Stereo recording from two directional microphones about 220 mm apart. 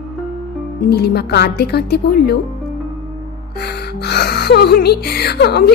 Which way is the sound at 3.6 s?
50° left (ahead or behind).